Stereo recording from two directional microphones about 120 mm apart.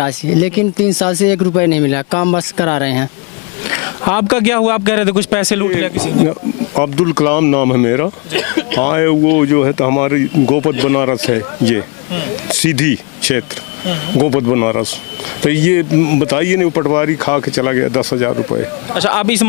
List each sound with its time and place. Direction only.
0.9 s a man's voice: 20° left (ahead or behind)